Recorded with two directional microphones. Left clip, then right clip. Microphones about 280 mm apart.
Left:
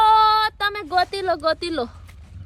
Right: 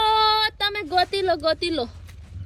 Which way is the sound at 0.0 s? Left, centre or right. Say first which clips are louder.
Left 4 dB; centre.